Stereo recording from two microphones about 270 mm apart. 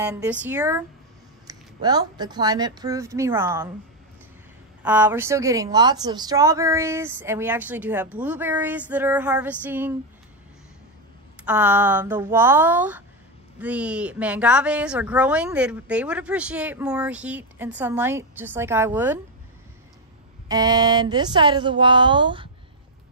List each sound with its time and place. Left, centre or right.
0.0 s speech: centre
4.8 s speech: centre
11.4 s a woman's voice: centre
20.4 s speech: centre